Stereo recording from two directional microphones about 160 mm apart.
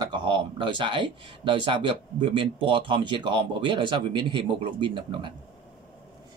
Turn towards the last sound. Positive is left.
turn(degrees=-30)  # may be behind; listen again after turning